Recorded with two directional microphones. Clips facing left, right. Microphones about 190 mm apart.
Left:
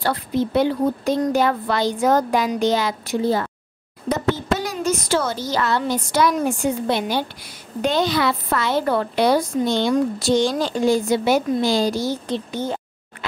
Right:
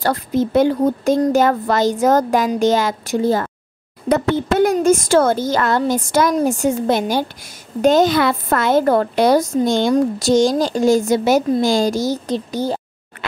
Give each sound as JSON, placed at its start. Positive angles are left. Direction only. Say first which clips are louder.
{"t": 0.0, "sound": "a woman's voice", "louder": "right 3 dB", "side_deg": -45}